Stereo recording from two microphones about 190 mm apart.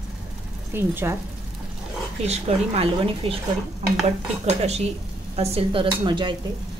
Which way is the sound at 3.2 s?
30° right (ahead or behind).